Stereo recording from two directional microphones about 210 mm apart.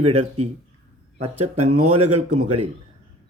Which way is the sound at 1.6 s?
90° right.